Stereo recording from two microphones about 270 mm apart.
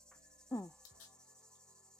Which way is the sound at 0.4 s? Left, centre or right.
Centre.